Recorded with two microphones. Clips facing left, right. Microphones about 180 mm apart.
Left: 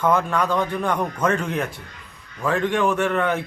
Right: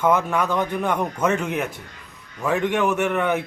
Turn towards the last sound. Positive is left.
turn(degrees=-10)  # may be behind; listen again after turning